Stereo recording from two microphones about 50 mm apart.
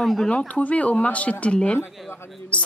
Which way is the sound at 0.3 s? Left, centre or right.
Left.